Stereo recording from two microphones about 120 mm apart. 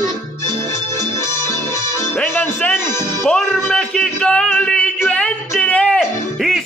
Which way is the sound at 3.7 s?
10° left (ahead or behind).